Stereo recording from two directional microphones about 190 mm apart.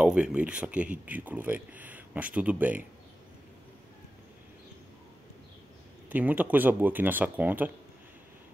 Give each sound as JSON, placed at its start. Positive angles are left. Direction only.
{"t": 0.0, "sound": "speech", "side_deg": -5}
{"t": 6.0, "sound": "speech", "side_deg": -10}